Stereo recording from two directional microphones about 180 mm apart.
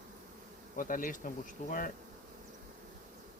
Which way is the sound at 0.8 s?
50° left (ahead or behind).